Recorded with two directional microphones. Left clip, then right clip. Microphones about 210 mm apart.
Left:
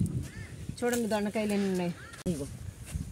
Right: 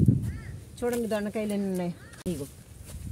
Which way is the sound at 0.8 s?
20° right (ahead or behind).